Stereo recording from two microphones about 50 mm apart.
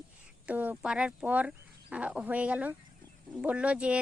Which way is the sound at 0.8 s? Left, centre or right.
Centre.